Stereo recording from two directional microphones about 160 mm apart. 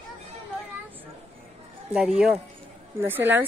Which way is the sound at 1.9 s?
5° right (ahead or behind).